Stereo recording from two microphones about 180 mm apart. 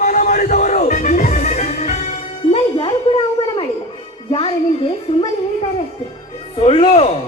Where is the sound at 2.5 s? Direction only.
30° left (ahead or behind).